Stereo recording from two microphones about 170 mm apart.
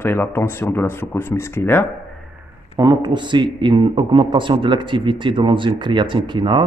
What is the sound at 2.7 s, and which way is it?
A man's voice, 25° right (ahead or behind).